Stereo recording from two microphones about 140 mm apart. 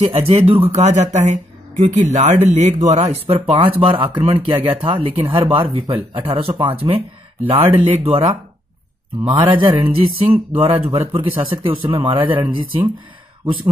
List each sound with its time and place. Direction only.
0.0 s speech: 50° right (ahead or behind)
8.0 s speech: 40° right (ahead or behind)